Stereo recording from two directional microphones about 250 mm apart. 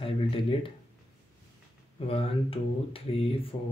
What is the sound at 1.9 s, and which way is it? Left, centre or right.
Speech, left.